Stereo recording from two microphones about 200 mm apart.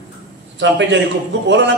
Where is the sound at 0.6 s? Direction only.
60° right (ahead or behind).